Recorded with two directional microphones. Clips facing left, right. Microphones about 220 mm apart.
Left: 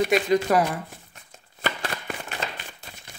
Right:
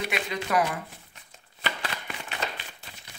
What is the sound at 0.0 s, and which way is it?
Speech, 40° left (ahead or behind).